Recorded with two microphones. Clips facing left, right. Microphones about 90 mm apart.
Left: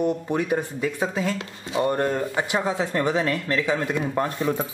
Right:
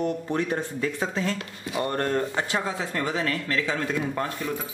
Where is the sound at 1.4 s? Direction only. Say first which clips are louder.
Left 4 dB; 25° left (ahead or behind).